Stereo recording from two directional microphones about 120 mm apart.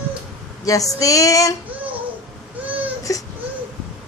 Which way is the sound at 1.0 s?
30° left (ahead or behind).